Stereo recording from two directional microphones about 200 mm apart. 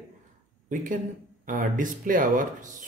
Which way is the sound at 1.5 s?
40° right (ahead or behind).